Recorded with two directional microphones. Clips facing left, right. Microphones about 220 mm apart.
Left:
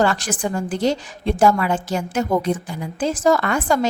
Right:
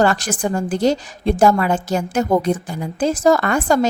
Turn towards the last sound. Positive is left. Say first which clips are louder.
# right 3 dB
turn(degrees=-40)  # may be behind; listen again after turning